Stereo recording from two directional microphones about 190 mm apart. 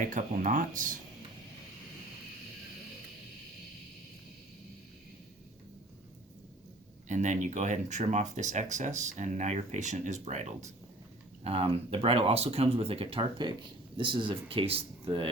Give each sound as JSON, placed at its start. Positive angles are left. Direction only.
{"t": 0.0, "sound": "speech", "side_deg": -45}
{"t": 7.1, "sound": "speech", "side_deg": -40}